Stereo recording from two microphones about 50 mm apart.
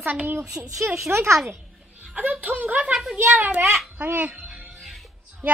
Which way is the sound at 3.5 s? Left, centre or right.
Right.